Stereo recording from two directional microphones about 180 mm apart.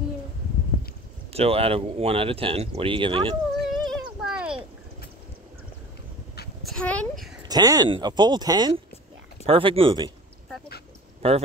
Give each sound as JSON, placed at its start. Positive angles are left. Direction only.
{"t": 1.3, "sound": "speech", "side_deg": -35}
{"t": 3.5, "sound": "a sound", "side_deg": 0}
{"t": 6.6, "sound": "a child's voice", "side_deg": 5}
{"t": 7.4, "sound": "speech", "side_deg": -20}
{"t": 11.2, "sound": "speech", "side_deg": -30}